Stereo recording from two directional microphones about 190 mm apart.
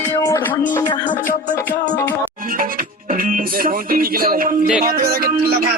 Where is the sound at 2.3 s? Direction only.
45° right (ahead or behind).